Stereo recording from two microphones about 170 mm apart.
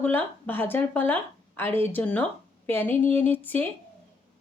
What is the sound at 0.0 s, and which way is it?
Speech, 10° left (ahead or behind).